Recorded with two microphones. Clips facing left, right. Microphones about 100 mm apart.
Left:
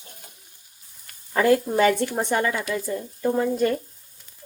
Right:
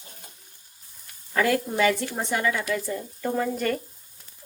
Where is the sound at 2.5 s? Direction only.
20° left (ahead or behind).